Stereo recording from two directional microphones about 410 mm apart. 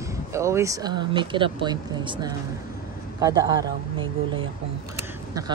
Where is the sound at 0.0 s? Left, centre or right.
Centre.